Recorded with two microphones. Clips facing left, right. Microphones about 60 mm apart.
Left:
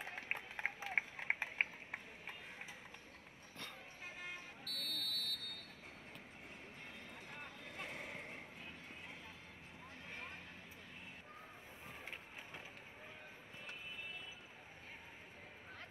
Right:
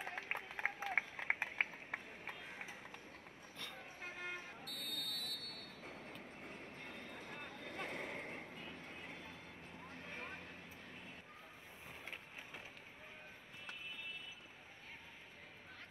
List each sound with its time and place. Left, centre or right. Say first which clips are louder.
0.0 s a sound: right 1 dB; right
3.7 s vehicle: right 2 dB; right
4.6 s buzzer: left 1 dB; left
5.1 s vehicle: left 2 dB; right